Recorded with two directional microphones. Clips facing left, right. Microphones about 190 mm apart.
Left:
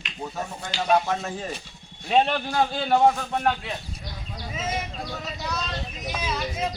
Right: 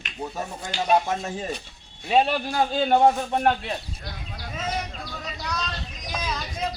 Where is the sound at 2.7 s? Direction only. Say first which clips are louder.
Right 2 dB; 20° right (ahead or behind).